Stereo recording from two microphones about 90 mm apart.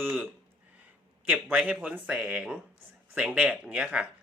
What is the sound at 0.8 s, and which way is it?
Speech, 20° right (ahead or behind).